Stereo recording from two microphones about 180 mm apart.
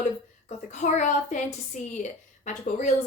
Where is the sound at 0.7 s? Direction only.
45° left (ahead or behind).